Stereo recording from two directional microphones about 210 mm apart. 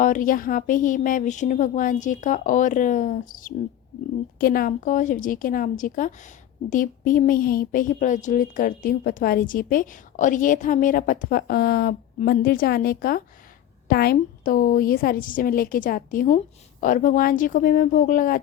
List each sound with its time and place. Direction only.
0.0 s a woman's voice: 40° left (ahead or behind)